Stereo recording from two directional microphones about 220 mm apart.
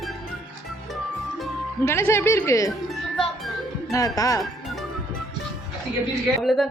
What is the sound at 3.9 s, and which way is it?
Speech, 15° left (ahead or behind).